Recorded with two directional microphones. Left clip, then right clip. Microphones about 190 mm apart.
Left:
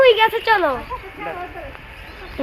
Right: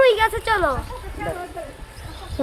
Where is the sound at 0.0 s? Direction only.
35° left (ahead or behind).